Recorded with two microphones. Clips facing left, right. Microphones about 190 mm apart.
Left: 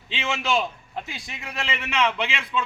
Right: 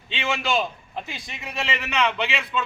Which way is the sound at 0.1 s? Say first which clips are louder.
Even; centre (ahead or behind).